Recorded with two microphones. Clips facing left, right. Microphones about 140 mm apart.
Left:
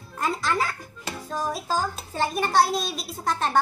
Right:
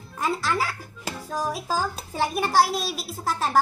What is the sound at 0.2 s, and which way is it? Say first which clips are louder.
A child's voice: even; centre (ahead or behind).